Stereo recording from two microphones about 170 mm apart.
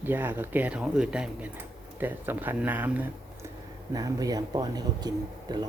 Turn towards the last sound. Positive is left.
turn(degrees=-25)  # may be behind; listen again after turning